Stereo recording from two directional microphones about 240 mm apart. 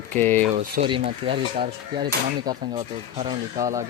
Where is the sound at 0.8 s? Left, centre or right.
Right.